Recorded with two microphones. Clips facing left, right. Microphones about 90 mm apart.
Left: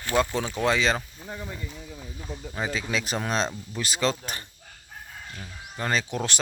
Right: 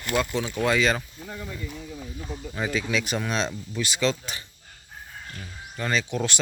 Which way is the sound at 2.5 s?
20° left (ahead or behind).